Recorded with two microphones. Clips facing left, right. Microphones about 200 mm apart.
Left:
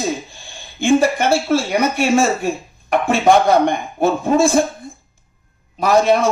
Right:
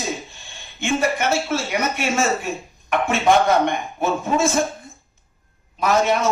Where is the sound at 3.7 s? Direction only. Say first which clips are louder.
Left 5 dB; 35° left (ahead or behind).